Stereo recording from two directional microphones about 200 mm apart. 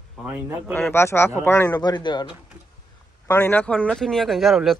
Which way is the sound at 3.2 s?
10° left (ahead or behind).